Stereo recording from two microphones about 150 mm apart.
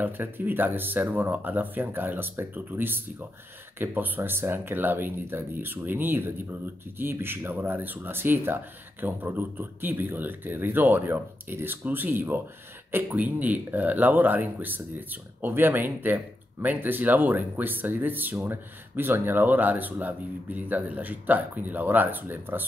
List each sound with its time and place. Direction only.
0.0 s speech: 15° right (ahead or behind)